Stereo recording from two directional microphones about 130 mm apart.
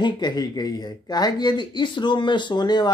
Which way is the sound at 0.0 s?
35° left (ahead or behind).